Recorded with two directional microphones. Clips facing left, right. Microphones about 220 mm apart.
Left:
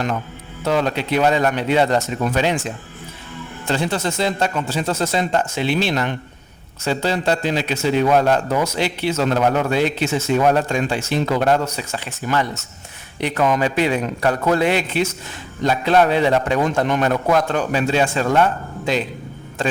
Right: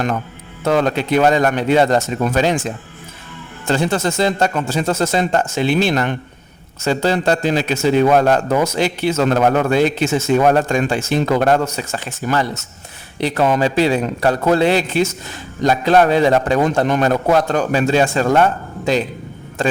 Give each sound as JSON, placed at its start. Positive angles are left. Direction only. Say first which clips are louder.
{"t": 0.6, "sound": "a man's voice", "louder": "right 3 dB", "side_deg": -50}
{"t": 3.7, "sound": "a man's voice", "louder": "right 4 dB", "side_deg": -45}